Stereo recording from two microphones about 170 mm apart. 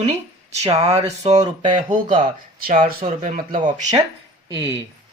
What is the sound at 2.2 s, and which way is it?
Speech, 50° right (ahead or behind).